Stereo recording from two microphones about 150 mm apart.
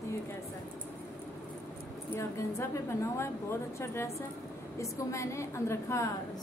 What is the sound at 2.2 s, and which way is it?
A woman's voice, 20° left (ahead or behind).